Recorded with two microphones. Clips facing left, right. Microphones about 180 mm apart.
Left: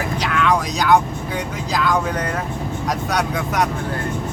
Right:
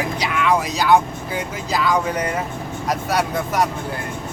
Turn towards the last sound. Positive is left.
turn(degrees=0)  # may be behind; listen again after turning